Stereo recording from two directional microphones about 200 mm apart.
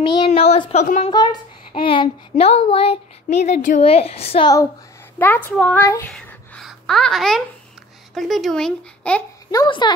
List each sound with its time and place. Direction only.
0.0 s a woman's voice: 25° left (ahead or behind)
1.1 s speech: 20° left (ahead or behind)
5.2 s a child's voice: 10° left (ahead or behind)
6.0 s a sound: 5° left (ahead or behind)
8.1 s speech: centre (ahead or behind)
9.5 s speech: 20° left (ahead or behind)